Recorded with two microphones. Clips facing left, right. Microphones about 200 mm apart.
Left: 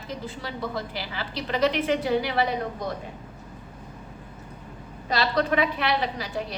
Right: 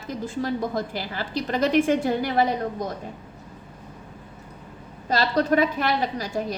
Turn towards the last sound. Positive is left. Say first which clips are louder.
# right 4 dB
turn(degrees=-45)  # may be behind; listen again after turning